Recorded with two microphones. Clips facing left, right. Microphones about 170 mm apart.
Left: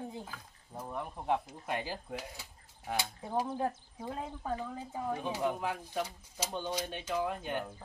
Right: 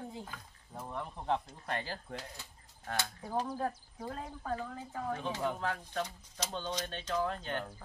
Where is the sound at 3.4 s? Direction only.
25° left (ahead or behind).